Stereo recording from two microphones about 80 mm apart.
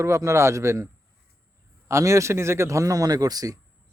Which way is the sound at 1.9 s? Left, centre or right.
Right.